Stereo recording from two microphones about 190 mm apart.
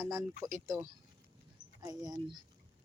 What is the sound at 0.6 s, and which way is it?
A woman's voice, 15° right (ahead or behind).